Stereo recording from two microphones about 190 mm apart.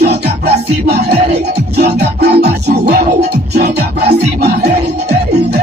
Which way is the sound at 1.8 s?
60° right (ahead or behind).